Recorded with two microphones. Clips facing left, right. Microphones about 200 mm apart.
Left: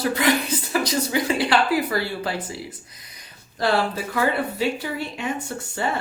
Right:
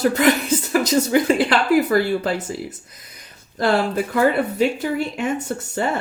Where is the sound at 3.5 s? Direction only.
50° right (ahead or behind).